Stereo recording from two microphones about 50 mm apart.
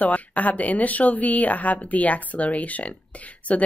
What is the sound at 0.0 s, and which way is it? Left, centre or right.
A woman's voice, left.